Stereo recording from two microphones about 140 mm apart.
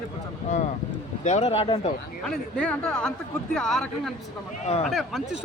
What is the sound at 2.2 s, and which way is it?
Speech, 5° left (ahead or behind).